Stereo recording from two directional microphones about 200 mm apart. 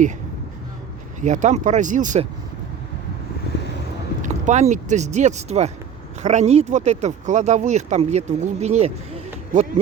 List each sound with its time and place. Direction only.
1.2 s speech: 35° right (ahead or behind)
4.2 s speech: 35° right (ahead or behind)